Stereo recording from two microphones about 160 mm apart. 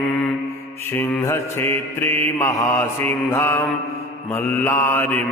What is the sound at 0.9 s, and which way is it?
Mantra, 15° left (ahead or behind).